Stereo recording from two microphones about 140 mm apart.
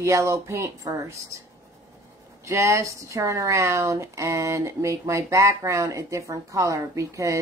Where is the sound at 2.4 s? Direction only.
20° right (ahead or behind).